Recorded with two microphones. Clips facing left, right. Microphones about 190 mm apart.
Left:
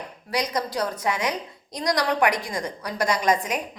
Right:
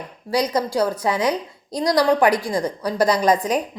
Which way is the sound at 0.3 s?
30° right (ahead or behind).